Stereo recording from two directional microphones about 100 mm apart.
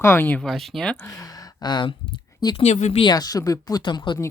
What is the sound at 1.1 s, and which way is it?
Speech, 35° left (ahead or behind).